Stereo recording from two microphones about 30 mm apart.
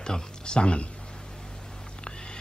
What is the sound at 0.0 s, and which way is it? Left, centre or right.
Speech, left.